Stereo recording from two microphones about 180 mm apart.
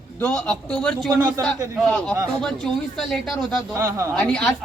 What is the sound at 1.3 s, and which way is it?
Speech, 20° right (ahead or behind).